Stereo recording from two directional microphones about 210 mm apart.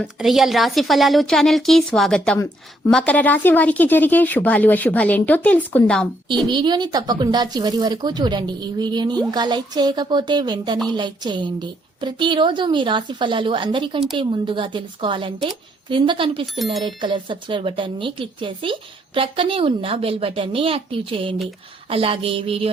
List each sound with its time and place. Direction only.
0.0 s a woman's voice: centre (ahead or behind)
6.5 s speech: 20° right (ahead or behind)